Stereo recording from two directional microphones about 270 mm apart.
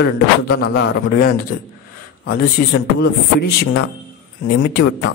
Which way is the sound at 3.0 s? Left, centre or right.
Left.